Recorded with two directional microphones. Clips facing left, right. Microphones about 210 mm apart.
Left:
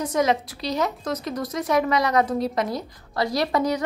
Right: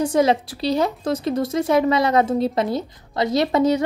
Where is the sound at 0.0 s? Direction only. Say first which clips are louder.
Right 4 dB; 30° right (ahead or behind).